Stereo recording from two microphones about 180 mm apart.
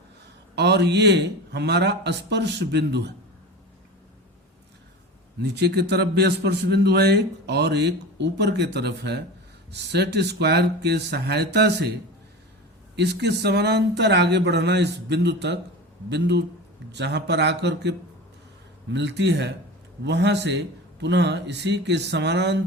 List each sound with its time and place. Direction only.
0.5 s a man's voice: 70° right (ahead or behind)
5.4 s a man's voice: 70° right (ahead or behind)
13.0 s a man's voice: 70° right (ahead or behind)